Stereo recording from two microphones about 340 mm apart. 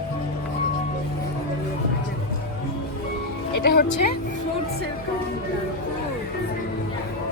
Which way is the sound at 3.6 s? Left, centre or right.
Left.